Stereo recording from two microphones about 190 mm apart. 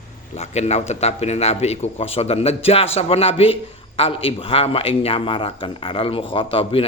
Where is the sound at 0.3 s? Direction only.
35° left (ahead or behind).